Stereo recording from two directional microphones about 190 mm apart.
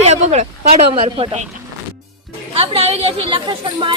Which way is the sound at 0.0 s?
35° right (ahead or behind).